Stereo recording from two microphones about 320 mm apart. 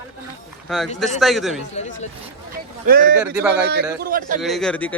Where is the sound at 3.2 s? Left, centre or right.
Centre.